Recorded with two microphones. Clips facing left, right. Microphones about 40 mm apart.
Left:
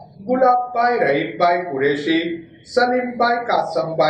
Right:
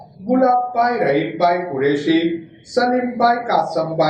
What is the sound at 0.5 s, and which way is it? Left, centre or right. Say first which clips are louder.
Speech: right 1 dB; centre.